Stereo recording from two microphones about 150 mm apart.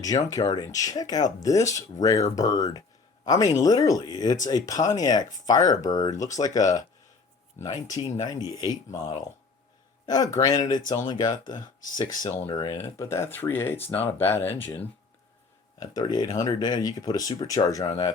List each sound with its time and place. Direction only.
0.3 s speech: 25° left (ahead or behind)
10.1 s speech: 25° left (ahead or behind)
15.8 s speech: 25° left (ahead or behind)